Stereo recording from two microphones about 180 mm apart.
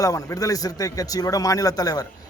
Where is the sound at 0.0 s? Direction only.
20° left (ahead or behind).